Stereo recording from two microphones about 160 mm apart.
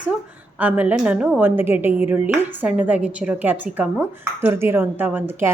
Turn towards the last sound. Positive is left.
turn(degrees=-10)  # may be behind; listen again after turning